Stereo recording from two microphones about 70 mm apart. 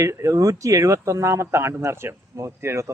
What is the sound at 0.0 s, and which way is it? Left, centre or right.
Speech, right.